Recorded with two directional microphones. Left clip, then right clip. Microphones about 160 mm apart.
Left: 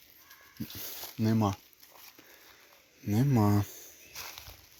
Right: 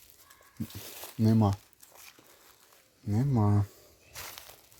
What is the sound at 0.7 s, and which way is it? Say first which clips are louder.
Speech: left 2 dB; 20° right (ahead or behind).